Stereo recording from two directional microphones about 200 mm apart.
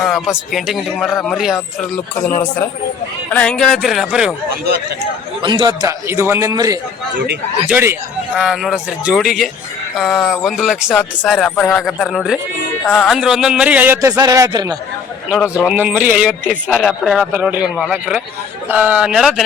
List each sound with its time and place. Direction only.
0.0 s a man's voice: centre (ahead or behind)
3.3 s a man's voice: 5° left (ahead or behind)
5.4 s a man's voice: 25° right (ahead or behind)
8.4 s a man's voice: centre (ahead or behind); by 14.8 s 20° right (ahead or behind)
15.6 s a man's voice: 5° right (ahead or behind)